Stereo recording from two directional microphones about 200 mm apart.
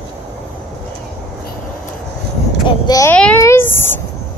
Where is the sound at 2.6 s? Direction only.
20° left (ahead or behind).